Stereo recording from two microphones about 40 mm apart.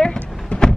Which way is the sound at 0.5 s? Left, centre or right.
Left.